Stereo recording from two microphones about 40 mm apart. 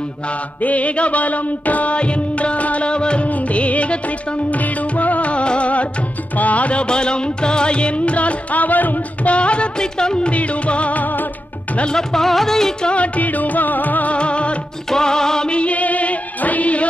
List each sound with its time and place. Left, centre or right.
0.6 s music: left
3.3 s music: left
9.3 s music: left
10.3 s music: left
11.9 s music: centre
12.8 s music: left
14.1 s music: left
14.9 s music: centre
15.5 s music: left